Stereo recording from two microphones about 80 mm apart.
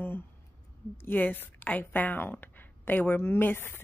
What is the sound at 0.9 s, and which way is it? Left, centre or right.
Speech, left.